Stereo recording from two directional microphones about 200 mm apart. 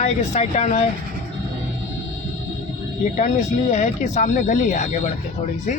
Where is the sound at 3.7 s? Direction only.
40° left (ahead or behind).